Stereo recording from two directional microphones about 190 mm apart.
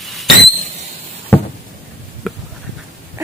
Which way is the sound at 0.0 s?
Centre (ahead or behind).